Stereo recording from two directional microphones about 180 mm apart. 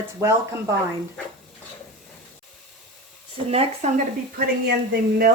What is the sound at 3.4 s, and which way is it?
Speech, 35° right (ahead or behind).